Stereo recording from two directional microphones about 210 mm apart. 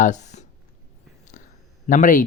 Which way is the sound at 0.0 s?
35° left (ahead or behind).